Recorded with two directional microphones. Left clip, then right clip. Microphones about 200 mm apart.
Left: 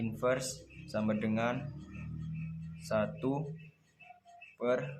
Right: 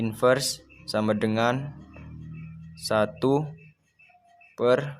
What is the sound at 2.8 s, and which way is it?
Speech, 50° right (ahead or behind).